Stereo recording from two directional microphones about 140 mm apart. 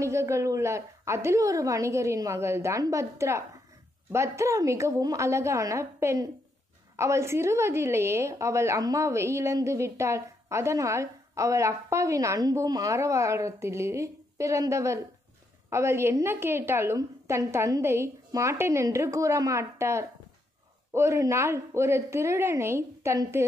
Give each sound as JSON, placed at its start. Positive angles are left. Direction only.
{"t": 0.0, "sound": "a woman's voice", "side_deg": -20}